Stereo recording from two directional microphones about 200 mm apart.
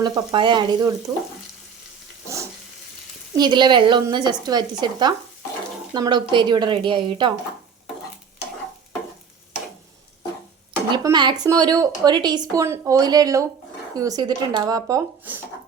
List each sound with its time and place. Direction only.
0.0 s speech: 20° right (ahead or behind)
3.3 s speech: 20° right (ahead or behind)
10.8 s speech: 20° right (ahead or behind)